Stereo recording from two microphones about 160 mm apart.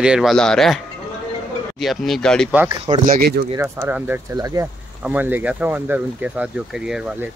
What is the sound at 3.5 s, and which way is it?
Speech, 15° right (ahead or behind).